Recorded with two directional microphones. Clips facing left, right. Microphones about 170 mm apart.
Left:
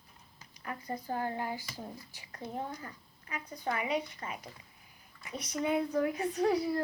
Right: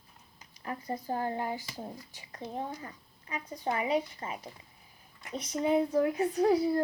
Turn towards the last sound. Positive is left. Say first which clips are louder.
# right 4 dB
turn(degrees=-25)  # may be behind; listen again after turning